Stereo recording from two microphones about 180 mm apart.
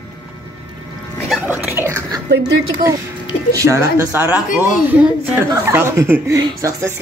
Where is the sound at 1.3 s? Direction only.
10° right (ahead or behind).